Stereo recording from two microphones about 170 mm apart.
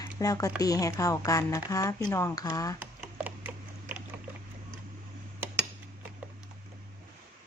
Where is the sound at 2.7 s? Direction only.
10° right (ahead or behind).